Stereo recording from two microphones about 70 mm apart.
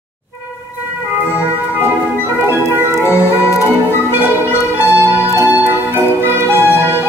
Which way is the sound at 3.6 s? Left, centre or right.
Right.